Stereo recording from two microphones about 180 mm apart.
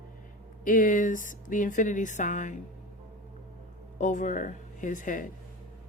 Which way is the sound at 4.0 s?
45° left (ahead or behind).